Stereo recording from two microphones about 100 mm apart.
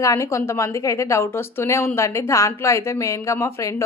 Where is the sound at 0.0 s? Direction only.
30° left (ahead or behind).